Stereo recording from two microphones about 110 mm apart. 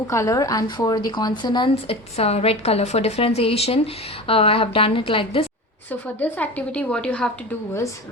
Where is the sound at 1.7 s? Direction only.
65° left (ahead or behind).